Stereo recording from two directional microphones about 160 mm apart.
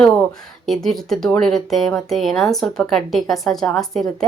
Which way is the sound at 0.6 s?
Centre (ahead or behind).